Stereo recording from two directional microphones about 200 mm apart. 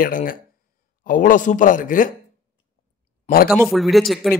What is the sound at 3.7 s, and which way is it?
Speech, centre (ahead or behind).